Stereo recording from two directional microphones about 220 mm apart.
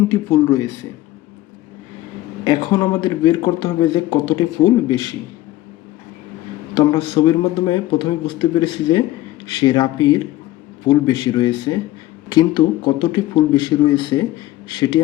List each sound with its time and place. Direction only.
0.1 s speech: 15° left (ahead or behind)
2.4 s speech: 20° left (ahead or behind)
6.9 s speech: 20° left (ahead or behind)